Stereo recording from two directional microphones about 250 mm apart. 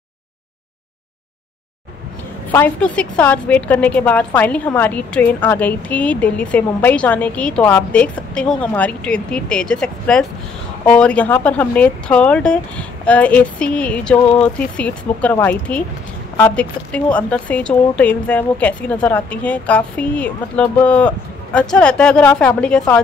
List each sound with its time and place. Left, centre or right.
2.5 s a woman's voice: centre